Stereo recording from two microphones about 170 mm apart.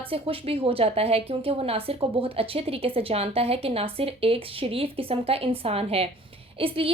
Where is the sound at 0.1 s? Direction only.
35° right (ahead or behind).